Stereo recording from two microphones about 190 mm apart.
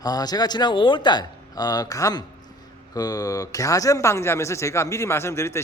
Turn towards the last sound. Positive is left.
turn(degrees=15)  # may be behind; listen again after turning